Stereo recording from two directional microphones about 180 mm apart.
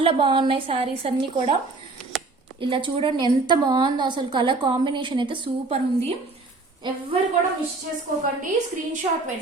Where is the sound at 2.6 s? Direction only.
30° right (ahead or behind).